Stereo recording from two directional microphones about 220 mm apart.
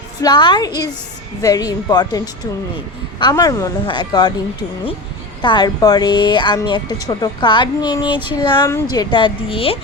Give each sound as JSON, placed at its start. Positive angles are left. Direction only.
{"t": 0.2, "sound": "a woman's voice", "side_deg": 20}
{"t": 5.4, "sound": "a woman's voice", "side_deg": 20}